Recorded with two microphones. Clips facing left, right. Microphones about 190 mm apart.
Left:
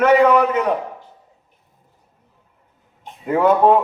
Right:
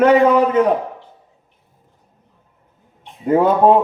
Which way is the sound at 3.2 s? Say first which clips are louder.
Right 2 dB; 35° right (ahead or behind).